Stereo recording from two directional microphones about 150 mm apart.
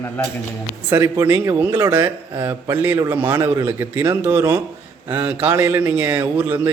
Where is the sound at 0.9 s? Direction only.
15° right (ahead or behind).